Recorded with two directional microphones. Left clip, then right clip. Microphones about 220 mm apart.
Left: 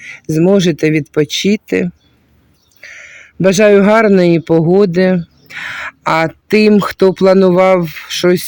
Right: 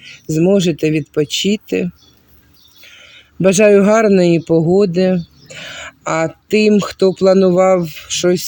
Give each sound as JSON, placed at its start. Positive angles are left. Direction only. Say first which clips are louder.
{"t": 0.0, "sound": "speech", "louder": "left 2 dB", "side_deg": 10}
{"t": 2.9, "sound": "speech", "louder": "left 8 dB", "side_deg": 10}